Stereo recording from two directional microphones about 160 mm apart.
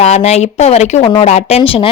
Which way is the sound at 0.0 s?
40° left (ahead or behind).